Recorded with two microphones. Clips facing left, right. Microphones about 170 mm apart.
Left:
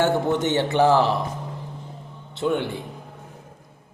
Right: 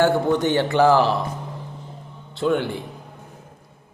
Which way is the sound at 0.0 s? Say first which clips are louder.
Right 2 dB; 20° left (ahead or behind).